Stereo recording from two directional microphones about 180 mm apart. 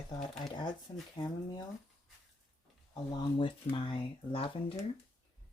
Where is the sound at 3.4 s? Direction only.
30° left (ahead or behind).